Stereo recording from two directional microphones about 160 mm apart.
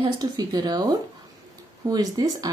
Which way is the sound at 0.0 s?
25° right (ahead or behind).